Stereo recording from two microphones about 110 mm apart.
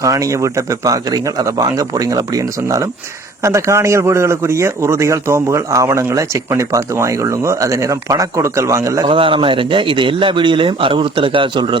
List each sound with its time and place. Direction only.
0.0 s a man's voice: 30° right (ahead or behind)
9.0 s a man's voice: 50° right (ahead or behind)